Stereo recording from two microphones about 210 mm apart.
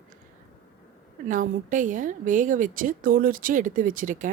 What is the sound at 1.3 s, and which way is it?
A woman's voice, 40° right (ahead or behind).